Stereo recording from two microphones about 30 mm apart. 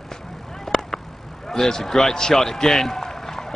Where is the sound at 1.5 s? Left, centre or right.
Centre.